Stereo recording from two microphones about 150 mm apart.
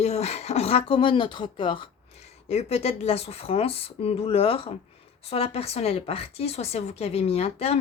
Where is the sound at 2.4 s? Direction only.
45° left (ahead or behind).